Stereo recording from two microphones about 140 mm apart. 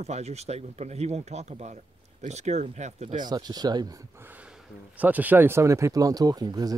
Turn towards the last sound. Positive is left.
turn(degrees=-25)  # may be behind; listen again after turning